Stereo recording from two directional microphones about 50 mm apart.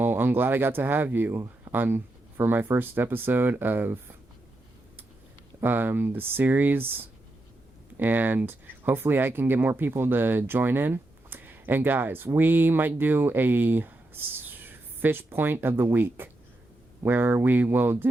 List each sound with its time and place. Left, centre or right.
0.0 s speech: right
5.6 s speech: right
7.9 s speech: right